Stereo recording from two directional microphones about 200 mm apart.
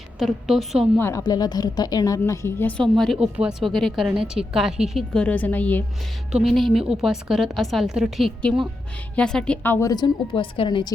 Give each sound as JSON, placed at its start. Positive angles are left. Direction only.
{"t": 0.2, "sound": "a woman's voice", "side_deg": 0}
{"t": 0.9, "sound": "a woman's voice", "side_deg": 15}
{"t": 9.8, "sound": "a woman's voice", "side_deg": 20}